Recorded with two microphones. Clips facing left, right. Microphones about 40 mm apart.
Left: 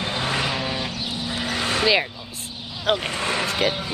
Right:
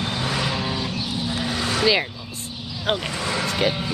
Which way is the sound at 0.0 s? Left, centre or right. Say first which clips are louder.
Left 1 dB; left.